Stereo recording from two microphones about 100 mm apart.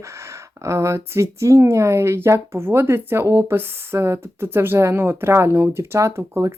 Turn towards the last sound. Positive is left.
turn(degrees=-30)  # may be behind; listen again after turning